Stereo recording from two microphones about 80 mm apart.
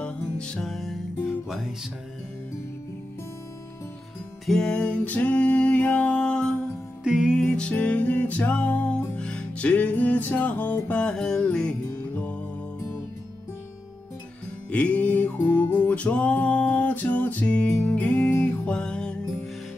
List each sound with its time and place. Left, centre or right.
0.0 s music: centre
4.5 s music: centre
7.1 s music: centre
7.4 s music: centre
14.7 s music: centre
18.7 s music: centre